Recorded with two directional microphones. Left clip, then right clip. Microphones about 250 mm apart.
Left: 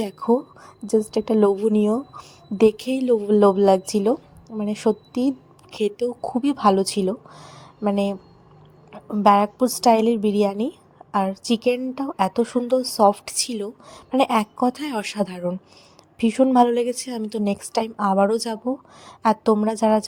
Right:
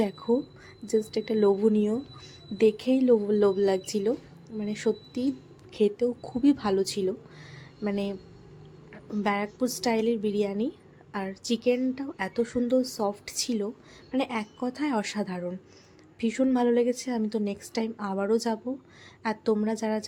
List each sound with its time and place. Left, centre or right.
0.0 s a woman's voice: left